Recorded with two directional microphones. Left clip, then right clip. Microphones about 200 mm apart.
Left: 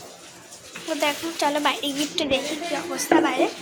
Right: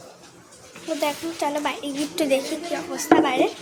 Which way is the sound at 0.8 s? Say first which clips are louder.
Left 1 dB; 5° right (ahead or behind).